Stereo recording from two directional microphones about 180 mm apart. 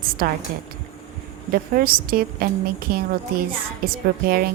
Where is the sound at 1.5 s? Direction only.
55° right (ahead or behind).